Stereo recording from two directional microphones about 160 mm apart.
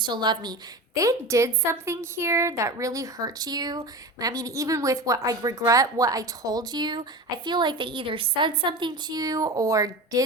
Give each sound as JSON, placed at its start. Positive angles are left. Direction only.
{"t": 0.0, "sound": "a woman's voice", "side_deg": -30}